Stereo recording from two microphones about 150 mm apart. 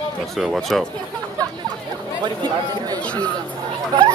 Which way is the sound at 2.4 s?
25° right (ahead or behind).